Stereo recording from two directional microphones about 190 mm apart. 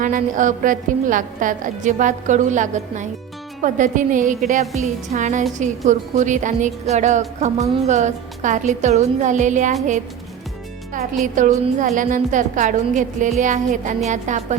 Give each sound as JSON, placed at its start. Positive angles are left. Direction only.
{"t": 0.0, "sound": "a woman's voice", "side_deg": -45}
{"t": 11.3, "sound": "a woman's voice", "side_deg": -40}